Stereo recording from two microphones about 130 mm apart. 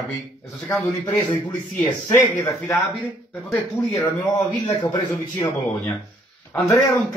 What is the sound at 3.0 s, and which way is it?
Speech, 5° left (ahead or behind).